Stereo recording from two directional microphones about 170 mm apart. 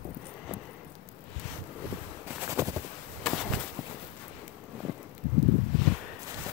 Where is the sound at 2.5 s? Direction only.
15° right (ahead or behind).